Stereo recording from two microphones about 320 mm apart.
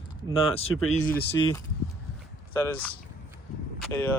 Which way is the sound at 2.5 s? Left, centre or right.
Centre.